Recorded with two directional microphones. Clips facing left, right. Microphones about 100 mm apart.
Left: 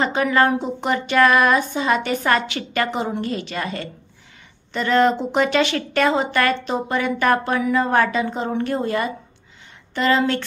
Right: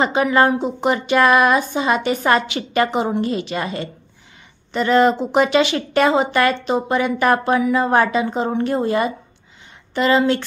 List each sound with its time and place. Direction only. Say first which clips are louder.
0.0 s speech: right 2 dB; 15° right (ahead or behind)